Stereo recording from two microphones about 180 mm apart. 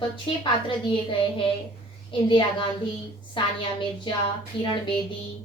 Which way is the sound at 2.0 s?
25° left (ahead or behind).